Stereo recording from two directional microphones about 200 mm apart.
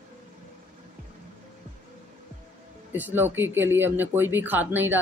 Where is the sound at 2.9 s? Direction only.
10° right (ahead or behind).